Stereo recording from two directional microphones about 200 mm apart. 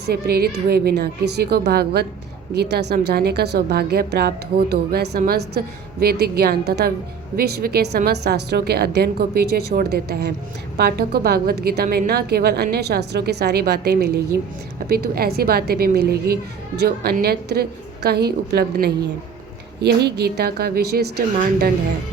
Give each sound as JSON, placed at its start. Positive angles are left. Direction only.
{"t": 0.0, "sound": "a woman's voice", "side_deg": -50}